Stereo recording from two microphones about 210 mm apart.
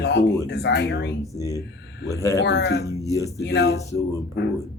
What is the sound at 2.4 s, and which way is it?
Speech, 55° left (ahead or behind).